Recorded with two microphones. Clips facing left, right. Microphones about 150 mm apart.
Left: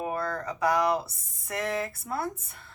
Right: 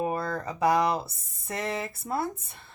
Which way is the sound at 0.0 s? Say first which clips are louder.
Right 2 dB; 25° right (ahead or behind).